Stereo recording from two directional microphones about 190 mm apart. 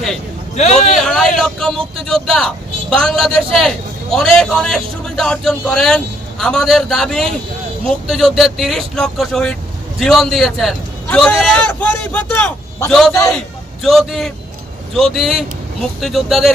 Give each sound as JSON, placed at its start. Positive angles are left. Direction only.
{"t": 0.6, "sound": "a man's voice", "side_deg": 35}
{"t": 0.9, "sound": "speech", "side_deg": 0}